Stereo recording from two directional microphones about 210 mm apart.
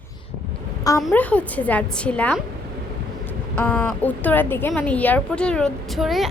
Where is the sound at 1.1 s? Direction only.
5° left (ahead or behind).